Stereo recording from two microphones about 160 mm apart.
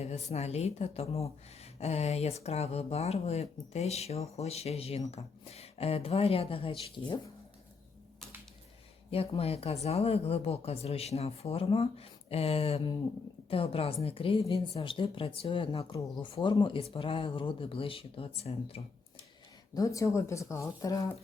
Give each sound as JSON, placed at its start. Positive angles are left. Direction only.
{"t": 0.3, "sound": "speech", "side_deg": 40}
{"t": 9.0, "sound": "speech", "side_deg": 35}
{"t": 19.7, "sound": "speech", "side_deg": 20}